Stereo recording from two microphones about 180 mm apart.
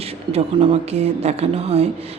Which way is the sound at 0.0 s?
35° right (ahead or behind).